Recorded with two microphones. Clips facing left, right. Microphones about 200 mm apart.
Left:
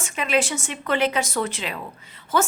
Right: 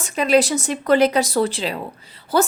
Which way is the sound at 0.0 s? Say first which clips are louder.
Right 6 dB; 35° right (ahead or behind).